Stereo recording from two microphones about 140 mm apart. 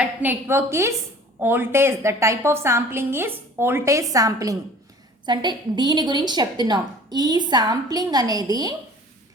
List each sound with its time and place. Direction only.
0.0 s a woman's voice: 15° right (ahead or behind)